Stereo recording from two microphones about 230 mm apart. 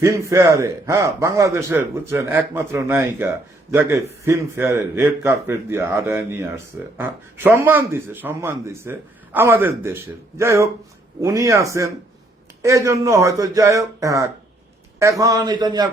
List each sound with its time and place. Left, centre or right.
0.0 s a man's voice: centre